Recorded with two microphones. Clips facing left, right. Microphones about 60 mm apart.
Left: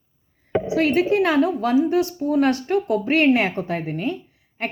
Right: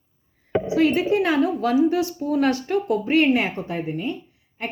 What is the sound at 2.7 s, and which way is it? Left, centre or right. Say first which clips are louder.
Speech: left 1 dB; left.